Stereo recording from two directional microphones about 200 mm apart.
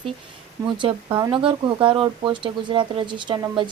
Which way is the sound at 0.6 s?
25° right (ahead or behind).